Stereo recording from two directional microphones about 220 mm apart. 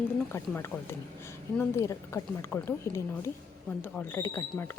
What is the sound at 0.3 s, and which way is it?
A woman's voice, 10° left (ahead or behind).